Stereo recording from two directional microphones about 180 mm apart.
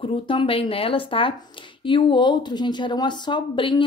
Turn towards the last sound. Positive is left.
turn(degrees=25)  # may be behind; listen again after turning